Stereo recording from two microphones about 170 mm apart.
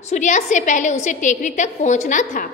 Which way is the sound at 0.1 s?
45° left (ahead or behind).